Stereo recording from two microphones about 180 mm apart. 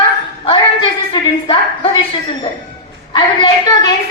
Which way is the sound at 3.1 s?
25° left (ahead or behind).